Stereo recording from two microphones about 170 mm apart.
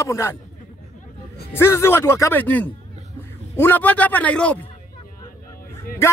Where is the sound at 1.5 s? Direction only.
15° left (ahead or behind).